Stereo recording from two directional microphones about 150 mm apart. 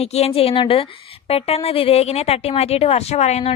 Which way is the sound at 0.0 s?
45° left (ahead or behind).